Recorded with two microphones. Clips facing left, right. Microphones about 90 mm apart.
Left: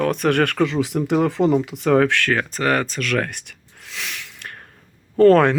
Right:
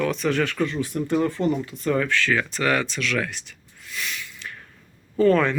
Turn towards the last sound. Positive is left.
turn(degrees=65)  # may be behind; listen again after turning